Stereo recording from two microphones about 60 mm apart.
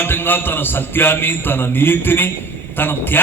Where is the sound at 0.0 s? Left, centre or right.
Left.